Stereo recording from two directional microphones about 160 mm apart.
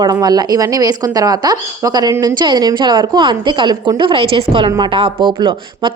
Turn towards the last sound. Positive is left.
turn(degrees=-30)  # may be behind; listen again after turning